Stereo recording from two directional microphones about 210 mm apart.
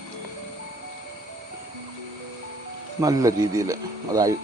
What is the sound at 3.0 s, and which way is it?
Speech, 15° right (ahead or behind).